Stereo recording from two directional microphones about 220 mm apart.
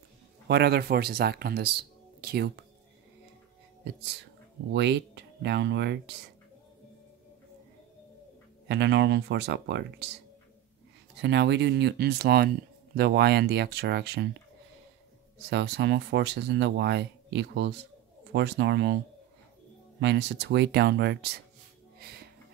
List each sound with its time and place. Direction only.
0.5 s speech: 50° right (ahead or behind)
4.7 s speech: 50° right (ahead or behind)
8.6 s speech: 50° right (ahead or behind)
11.1 s speech: 50° right (ahead or behind)
15.3 s speech: 50° right (ahead or behind)
20.0 s speech: 50° right (ahead or behind)
21.9 s music: 45° right (ahead or behind)